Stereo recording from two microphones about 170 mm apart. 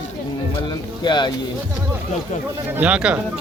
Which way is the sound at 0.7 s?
25° left (ahead or behind).